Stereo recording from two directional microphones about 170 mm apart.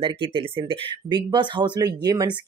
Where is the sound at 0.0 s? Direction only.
30° right (ahead or behind).